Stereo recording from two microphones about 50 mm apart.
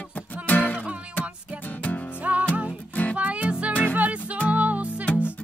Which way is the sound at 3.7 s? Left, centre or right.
Left.